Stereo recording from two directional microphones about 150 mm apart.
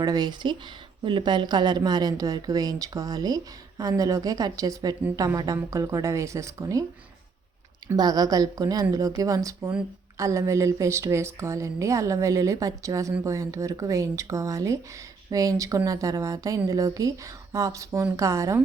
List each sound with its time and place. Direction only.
0.0 s speech: 25° right (ahead or behind)
7.9 s speech: 25° right (ahead or behind)